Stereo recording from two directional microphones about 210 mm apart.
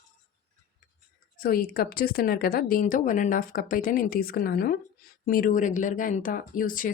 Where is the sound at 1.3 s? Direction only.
45° left (ahead or behind).